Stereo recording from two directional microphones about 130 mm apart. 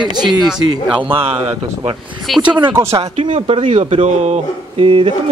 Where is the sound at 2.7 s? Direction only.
20° right (ahead or behind).